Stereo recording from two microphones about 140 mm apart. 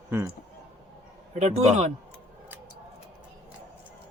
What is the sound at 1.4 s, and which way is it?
Speech, 50° right (ahead or behind).